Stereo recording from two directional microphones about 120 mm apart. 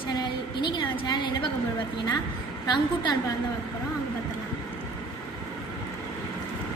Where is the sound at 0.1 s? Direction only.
35° left (ahead or behind).